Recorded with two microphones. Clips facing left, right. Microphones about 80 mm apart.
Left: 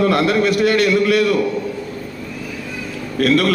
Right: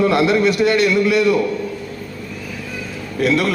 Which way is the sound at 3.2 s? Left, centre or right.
Left.